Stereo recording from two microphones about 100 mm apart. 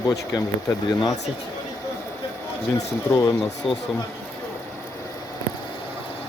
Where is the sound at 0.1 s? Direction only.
35° left (ahead or behind).